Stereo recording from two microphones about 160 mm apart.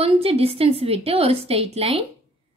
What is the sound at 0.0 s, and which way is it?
Speech, 35° right (ahead or behind).